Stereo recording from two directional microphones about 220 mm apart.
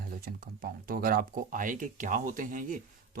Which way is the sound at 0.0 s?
40° right (ahead or behind).